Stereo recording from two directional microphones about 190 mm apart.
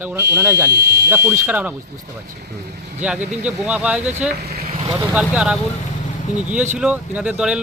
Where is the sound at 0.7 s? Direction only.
60° right (ahead or behind).